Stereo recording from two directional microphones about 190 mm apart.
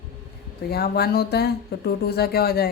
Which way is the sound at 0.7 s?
55° left (ahead or behind).